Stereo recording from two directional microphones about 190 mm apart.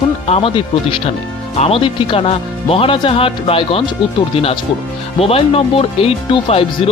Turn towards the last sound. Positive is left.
turn(degrees=30)  # may be behind; listen again after turning